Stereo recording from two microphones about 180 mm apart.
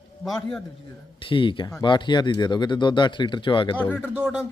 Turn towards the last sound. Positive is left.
turn(degrees=-5)  # may be behind; listen again after turning